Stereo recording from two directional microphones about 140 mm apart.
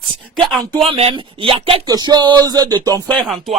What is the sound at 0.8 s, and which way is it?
Speech, 45° right (ahead or behind).